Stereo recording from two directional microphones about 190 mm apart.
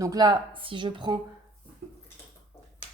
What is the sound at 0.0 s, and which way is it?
Speech, 20° right (ahead or behind).